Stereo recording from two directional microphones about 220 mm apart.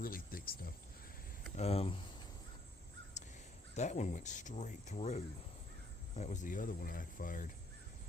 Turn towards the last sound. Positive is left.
turn(degrees=40)  # may be behind; listen again after turning